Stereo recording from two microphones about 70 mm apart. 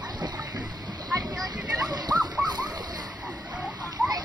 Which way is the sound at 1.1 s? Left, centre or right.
Right.